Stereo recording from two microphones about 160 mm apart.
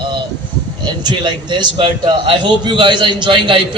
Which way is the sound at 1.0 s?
30° right (ahead or behind).